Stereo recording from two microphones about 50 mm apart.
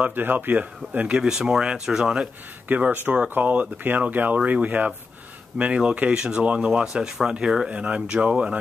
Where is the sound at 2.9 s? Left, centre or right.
Right.